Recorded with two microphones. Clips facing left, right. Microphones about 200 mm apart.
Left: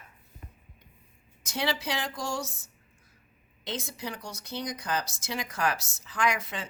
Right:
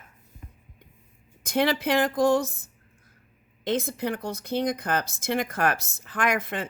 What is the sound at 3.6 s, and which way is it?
Speech, 55° right (ahead or behind).